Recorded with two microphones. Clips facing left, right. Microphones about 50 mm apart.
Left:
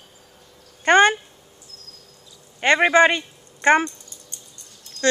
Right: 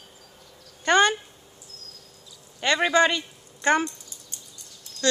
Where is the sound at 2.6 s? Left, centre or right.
Left.